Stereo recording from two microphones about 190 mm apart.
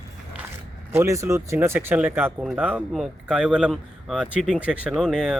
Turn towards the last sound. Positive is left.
turn(degrees=0)  # may be behind; listen again after turning